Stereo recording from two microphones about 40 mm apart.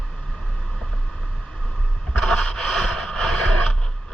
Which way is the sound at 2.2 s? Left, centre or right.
Centre.